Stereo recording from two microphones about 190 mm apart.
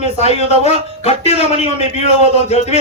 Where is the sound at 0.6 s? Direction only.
35° left (ahead or behind).